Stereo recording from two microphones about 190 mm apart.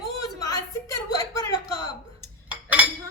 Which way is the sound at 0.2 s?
20° left (ahead or behind).